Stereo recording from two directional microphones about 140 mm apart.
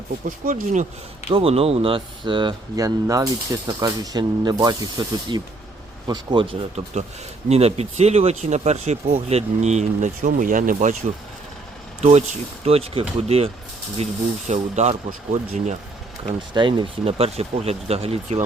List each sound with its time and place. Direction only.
0.3 s speech: 70° right (ahead or behind)
1.3 s speech: 45° right (ahead or behind); by 10.9 s 65° right (ahead or behind)
12.0 s speech: 50° right (ahead or behind)
16.6 s speech: 35° right (ahead or behind)